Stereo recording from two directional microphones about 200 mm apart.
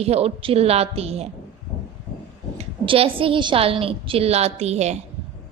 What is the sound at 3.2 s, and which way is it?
A woman's voice, 25° right (ahead or behind).